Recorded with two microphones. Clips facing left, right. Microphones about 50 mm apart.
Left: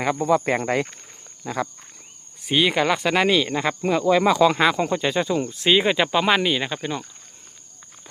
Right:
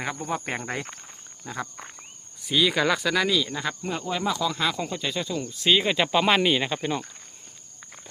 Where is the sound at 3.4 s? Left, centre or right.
Left.